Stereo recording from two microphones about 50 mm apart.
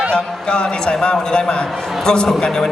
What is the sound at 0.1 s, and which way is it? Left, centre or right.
A man's voice, centre.